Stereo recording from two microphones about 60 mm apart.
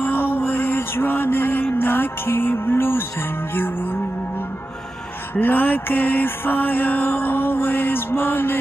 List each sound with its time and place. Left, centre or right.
0.0 s mantra: left
5.3 s music: left